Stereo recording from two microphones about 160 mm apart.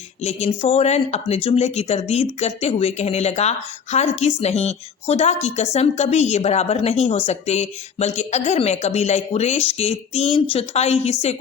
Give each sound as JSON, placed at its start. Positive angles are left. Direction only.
{"t": 0.3, "sound": "speech", "side_deg": 40}